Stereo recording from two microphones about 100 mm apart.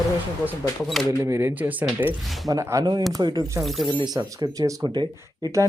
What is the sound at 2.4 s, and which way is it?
Speech, 35° right (ahead or behind).